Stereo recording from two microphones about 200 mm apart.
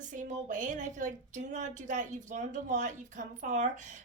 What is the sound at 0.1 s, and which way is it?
A woman's voice, 40° right (ahead or behind).